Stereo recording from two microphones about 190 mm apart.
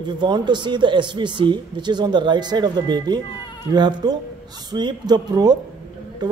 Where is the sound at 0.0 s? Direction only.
25° right (ahead or behind).